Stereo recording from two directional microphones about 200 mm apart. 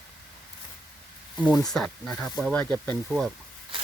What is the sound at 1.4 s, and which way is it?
Speech, centre (ahead or behind).